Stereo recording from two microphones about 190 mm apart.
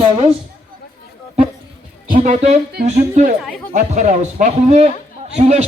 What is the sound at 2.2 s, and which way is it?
A man's voice, 35° right (ahead or behind).